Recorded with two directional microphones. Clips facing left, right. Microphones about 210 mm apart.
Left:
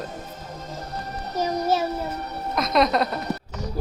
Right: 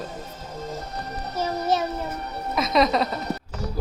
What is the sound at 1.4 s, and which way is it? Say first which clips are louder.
Child singing: left 1 dB; 10° left (ahead or behind).